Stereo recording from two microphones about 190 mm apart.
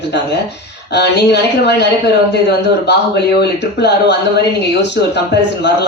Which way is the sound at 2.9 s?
60° left (ahead or behind).